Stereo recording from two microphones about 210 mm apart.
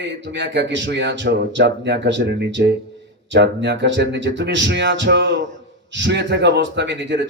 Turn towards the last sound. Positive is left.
turn(degrees=-60)  # may be behind; listen again after turning